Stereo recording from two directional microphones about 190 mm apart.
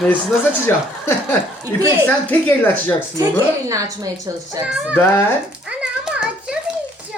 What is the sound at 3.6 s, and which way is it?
Speech, 15° right (ahead or behind).